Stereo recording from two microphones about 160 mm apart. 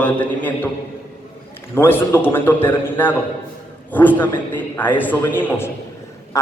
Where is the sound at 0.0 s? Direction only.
10° left (ahead or behind).